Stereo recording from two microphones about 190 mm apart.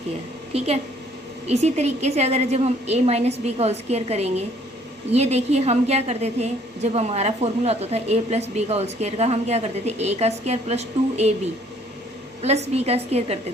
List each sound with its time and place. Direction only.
0.5 s a woman's voice: 35° right (ahead or behind)
12.4 s a woman's voice: 35° right (ahead or behind)